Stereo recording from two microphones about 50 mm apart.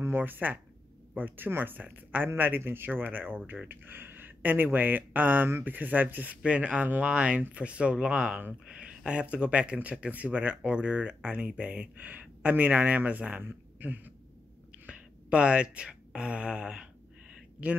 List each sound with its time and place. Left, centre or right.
0.1 s speech: right
6.4 s a man's voice: right
14.7 s a sound: right